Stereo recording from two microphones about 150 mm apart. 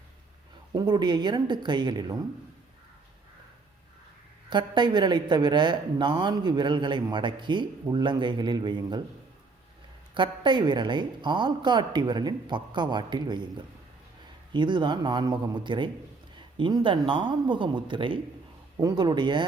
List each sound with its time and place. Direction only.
0.7 s speech: 30° right (ahead or behind)
4.4 s a woman's voice: 30° right (ahead or behind)
10.2 s a woman's voice: 30° right (ahead or behind)